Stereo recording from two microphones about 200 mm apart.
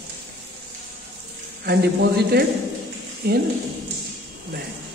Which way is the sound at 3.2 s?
50° right (ahead or behind).